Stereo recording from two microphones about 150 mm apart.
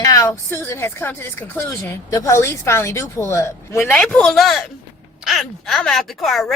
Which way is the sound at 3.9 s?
5° left (ahead or behind).